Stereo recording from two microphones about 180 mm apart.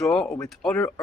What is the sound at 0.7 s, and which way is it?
Speech, 15° left (ahead or behind).